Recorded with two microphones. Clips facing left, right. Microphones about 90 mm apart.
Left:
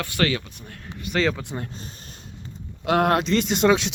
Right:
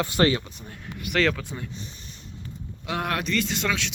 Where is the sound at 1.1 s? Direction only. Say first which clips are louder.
Even; 15° left (ahead or behind).